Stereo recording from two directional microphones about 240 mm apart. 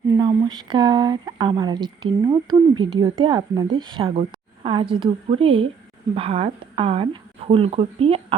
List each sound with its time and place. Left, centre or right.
0.1 s a woman's voice: centre